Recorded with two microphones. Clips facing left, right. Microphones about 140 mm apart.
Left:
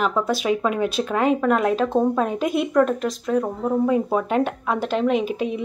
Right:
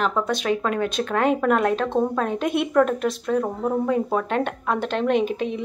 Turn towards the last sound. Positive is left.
turn(degrees=0)  # may be behind; listen again after turning